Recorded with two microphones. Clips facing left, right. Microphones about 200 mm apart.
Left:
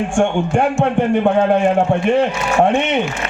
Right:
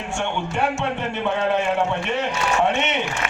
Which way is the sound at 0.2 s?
50° left (ahead or behind).